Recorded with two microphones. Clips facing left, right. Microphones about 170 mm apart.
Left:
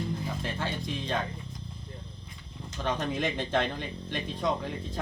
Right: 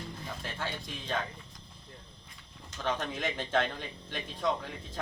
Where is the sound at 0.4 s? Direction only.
Centre (ahead or behind).